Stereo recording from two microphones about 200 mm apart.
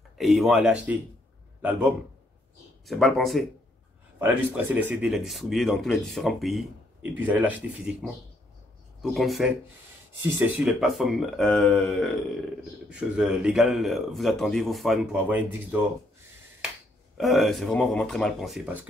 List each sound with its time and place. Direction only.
0.2 s a man's voice: centre (ahead or behind)
17.2 s speech: centre (ahead or behind)